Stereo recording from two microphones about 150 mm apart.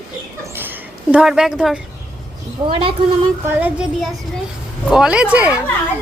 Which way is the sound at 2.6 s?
30° right (ahead or behind).